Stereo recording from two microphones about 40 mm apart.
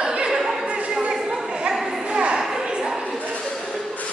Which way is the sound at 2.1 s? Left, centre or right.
Right.